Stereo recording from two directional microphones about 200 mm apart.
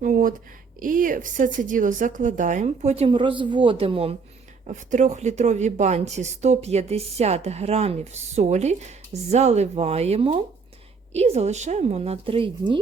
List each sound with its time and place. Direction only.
0.0 s speech: 40° right (ahead or behind); by 12.8 s 25° right (ahead or behind)